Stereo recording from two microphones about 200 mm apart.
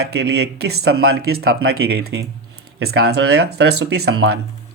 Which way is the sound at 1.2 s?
90° right.